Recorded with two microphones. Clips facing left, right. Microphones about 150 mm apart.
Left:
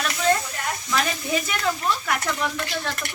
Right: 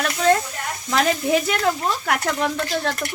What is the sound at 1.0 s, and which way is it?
Speech, 65° right (ahead or behind).